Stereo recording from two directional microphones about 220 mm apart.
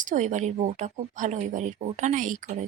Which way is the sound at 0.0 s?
35° right (ahead or behind).